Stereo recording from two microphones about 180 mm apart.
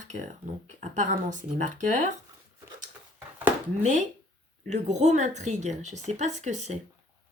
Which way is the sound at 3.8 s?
40° right (ahead or behind).